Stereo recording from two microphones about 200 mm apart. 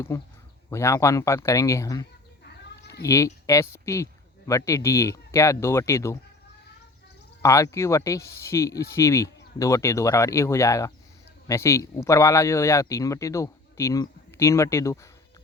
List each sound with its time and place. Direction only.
0.7 s speech: 15° left (ahead or behind)
7.4 s speech: 15° left (ahead or behind)